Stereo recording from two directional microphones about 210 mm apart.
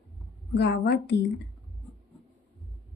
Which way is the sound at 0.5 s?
55° left (ahead or behind).